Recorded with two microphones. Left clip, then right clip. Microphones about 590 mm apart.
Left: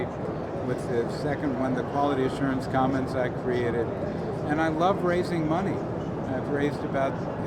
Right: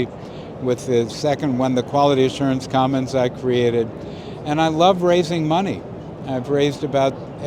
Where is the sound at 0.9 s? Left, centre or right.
Right.